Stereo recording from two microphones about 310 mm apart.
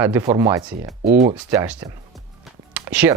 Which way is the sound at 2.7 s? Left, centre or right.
Centre.